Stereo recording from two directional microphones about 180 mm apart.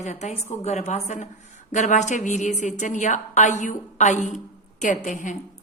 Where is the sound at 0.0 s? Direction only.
40° left (ahead or behind).